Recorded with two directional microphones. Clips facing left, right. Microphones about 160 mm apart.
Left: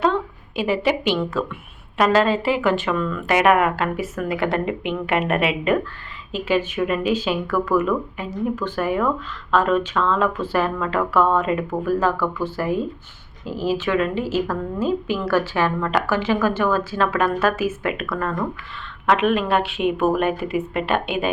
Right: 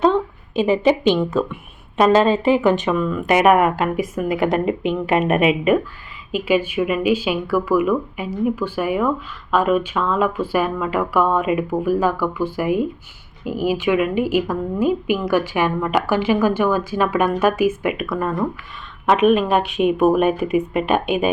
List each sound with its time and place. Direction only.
0.0 s a woman's voice: 20° right (ahead or behind)